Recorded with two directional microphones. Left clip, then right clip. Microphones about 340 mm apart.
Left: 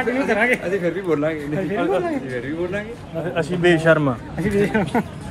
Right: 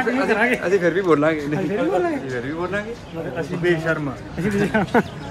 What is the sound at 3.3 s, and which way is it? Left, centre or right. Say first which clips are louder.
Speech: left 4 dB; centre.